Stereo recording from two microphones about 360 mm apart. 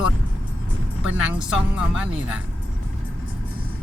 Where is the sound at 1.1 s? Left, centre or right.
Centre.